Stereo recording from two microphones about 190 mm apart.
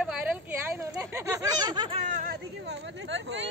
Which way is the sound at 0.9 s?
15° right (ahead or behind).